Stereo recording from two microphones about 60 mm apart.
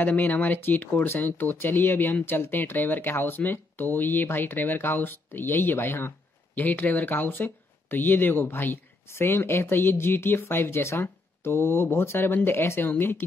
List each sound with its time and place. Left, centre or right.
0.0 s speech: left
6.5 s speech: left